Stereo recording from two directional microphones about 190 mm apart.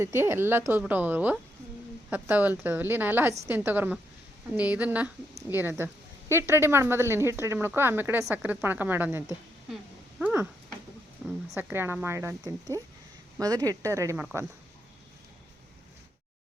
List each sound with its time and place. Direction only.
0.0 s speech: 15° right (ahead or behind)
9.6 s a sound: 5° right (ahead or behind)
11.2 s speech: 5° right (ahead or behind)